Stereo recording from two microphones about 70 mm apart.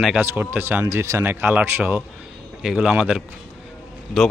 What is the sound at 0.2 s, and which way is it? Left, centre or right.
Speech, right.